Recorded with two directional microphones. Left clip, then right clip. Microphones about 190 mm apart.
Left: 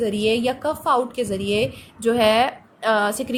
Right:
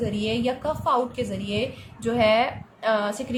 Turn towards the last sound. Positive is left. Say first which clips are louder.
# left 4 dB
turn(degrees=40)  # may be behind; listen again after turning